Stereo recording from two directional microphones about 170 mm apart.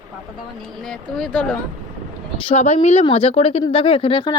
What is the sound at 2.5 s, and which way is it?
A woman's voice, 40° left (ahead or behind).